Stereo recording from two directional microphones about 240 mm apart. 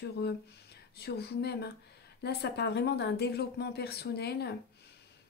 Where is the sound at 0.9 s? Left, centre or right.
Left.